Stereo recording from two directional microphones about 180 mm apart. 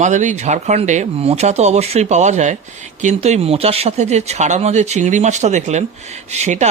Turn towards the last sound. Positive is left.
turn(degrees=-40)  # may be behind; listen again after turning